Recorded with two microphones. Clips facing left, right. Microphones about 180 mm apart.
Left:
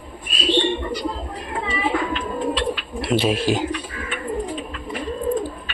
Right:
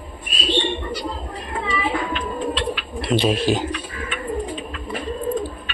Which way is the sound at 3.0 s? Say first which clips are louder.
Right 1 dB; 5° left (ahead or behind).